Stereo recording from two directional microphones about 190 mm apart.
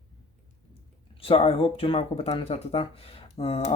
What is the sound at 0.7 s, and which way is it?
Speech, 30° left (ahead or behind).